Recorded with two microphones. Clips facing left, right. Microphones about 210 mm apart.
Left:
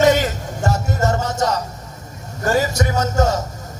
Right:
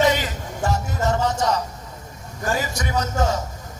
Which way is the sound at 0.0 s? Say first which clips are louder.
Left 5 dB; 45° left (ahead or behind).